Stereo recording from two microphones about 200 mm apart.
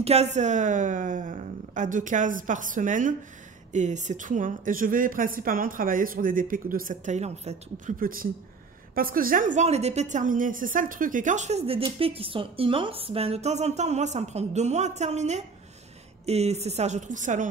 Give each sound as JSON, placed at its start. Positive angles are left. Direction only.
{"t": 0.0, "sound": "a woman's voice", "side_deg": -35}